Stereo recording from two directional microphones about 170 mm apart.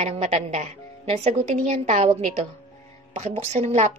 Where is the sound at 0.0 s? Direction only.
40° right (ahead or behind).